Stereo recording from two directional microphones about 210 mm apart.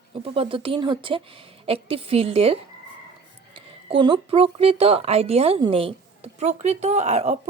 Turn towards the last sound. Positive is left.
turn(degrees=-30)  # may be behind; listen again after turning